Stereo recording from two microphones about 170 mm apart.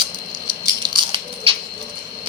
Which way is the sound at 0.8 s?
30° right (ahead or behind).